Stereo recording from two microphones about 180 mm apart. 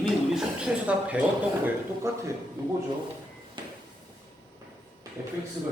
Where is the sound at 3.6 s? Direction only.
25° right (ahead or behind).